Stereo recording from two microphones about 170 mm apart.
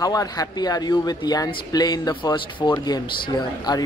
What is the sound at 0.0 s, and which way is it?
Speech, 20° left (ahead or behind).